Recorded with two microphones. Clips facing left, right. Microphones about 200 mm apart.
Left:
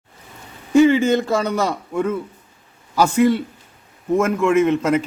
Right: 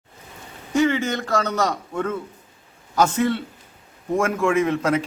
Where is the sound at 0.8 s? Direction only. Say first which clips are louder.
Left 7 dB; 15° left (ahead or behind).